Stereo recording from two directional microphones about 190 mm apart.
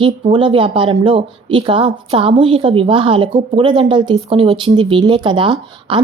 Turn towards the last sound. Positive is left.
turn(degrees=-25)  # may be behind; listen again after turning